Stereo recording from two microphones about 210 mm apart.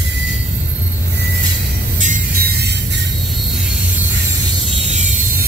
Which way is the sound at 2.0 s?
40° right (ahead or behind).